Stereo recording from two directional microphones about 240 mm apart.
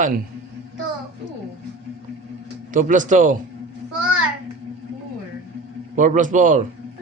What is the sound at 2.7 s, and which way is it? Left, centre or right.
Speech, right.